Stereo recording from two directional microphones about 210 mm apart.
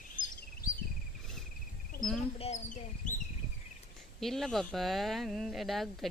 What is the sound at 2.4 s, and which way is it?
Speech, 35° left (ahead or behind).